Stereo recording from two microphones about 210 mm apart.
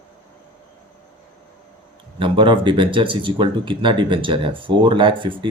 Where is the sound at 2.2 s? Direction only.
25° right (ahead or behind).